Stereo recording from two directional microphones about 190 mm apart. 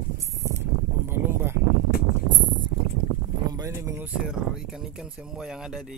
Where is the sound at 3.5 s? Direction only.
15° right (ahead or behind).